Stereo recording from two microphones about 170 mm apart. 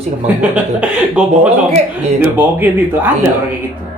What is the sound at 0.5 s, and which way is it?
Speech, 5° right (ahead or behind).